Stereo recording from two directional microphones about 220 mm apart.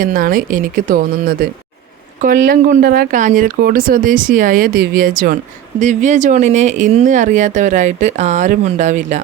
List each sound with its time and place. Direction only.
0.0 s speech: 40° right (ahead or behind)